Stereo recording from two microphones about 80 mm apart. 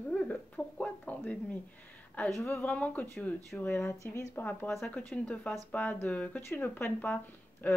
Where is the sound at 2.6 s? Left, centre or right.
Centre.